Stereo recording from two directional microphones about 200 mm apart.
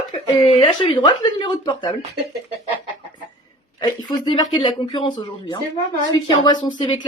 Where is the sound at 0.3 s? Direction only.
25° left (ahead or behind).